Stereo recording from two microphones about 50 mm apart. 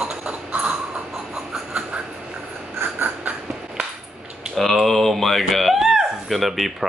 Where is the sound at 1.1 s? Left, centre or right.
Centre.